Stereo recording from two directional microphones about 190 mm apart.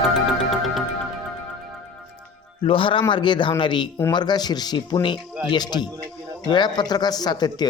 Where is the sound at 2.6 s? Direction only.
25° left (ahead or behind).